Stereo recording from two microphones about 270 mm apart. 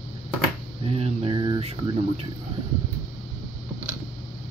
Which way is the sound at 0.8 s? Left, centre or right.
Right.